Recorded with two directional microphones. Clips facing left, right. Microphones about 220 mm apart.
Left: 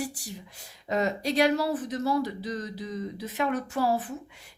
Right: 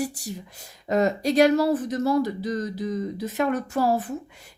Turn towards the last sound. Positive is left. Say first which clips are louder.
# right 4 dB
turn(degrees=-45)  # may be behind; listen again after turning